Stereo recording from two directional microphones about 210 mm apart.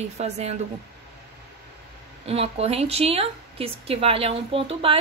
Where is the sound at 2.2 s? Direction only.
30° right (ahead or behind).